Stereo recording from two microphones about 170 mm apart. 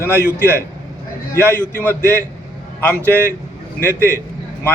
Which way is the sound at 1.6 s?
10° left (ahead or behind).